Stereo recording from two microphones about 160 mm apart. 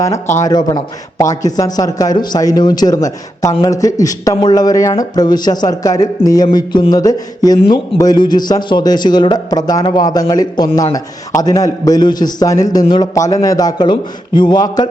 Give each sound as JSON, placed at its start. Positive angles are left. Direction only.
{"t": 0.4, "sound": "a man's voice", "side_deg": 25}